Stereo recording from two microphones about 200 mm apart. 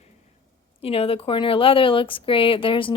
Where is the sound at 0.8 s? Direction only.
30° left (ahead or behind).